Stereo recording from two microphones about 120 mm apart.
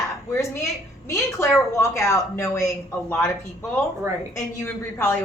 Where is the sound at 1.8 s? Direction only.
25° left (ahead or behind).